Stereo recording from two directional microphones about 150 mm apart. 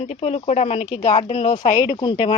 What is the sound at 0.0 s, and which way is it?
Speech, 40° left (ahead or behind).